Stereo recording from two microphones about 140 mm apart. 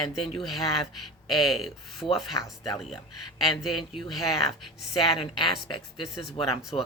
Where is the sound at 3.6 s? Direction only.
Centre (ahead or behind).